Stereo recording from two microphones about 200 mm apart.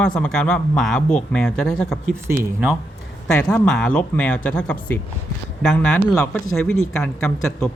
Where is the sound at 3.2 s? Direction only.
5° left (ahead or behind).